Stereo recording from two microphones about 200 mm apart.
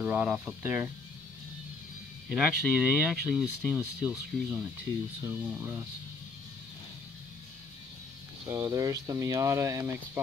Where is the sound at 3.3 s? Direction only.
Centre (ahead or behind).